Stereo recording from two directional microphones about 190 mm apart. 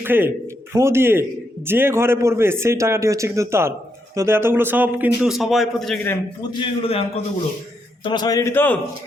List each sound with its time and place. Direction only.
0.0 s a man's voice: 10° right (ahead or behind)
6.5 s a man's voice: 30° left (ahead or behind)
8.0 s a man's voice: 20° left (ahead or behind)